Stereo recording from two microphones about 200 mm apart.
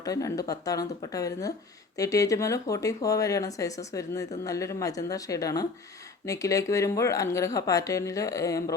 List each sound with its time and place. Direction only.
0.0 s speech: 15° left (ahead or behind)